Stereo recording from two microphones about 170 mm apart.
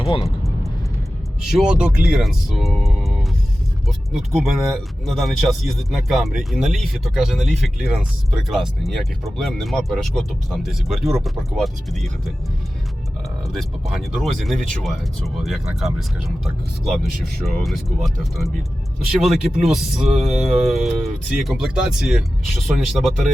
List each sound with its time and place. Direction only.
0.0 s speech: 35° left (ahead or behind)
1.4 s speech: 5° right (ahead or behind)
13.4 s speech: centre (ahead or behind)